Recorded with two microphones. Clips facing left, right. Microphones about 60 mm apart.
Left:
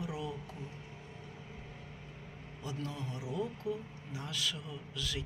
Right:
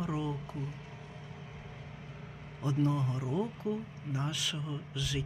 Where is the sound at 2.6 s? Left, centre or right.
Right.